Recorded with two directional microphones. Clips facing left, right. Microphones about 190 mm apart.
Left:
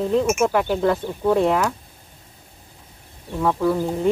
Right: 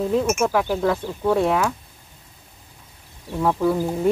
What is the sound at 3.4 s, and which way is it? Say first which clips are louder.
Speech: even; 5° right (ahead or behind).